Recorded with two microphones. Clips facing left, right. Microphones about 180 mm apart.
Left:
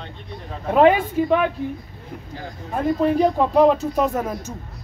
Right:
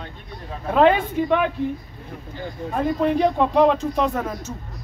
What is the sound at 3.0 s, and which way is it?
Speech, 5° left (ahead or behind).